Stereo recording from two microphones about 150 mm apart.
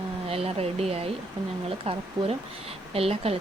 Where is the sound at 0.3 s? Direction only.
40° right (ahead or behind).